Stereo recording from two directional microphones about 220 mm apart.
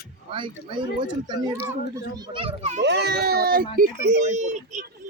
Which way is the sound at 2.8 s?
50° right (ahead or behind).